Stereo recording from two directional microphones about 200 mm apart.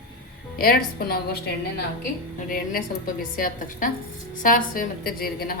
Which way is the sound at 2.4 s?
45° left (ahead or behind).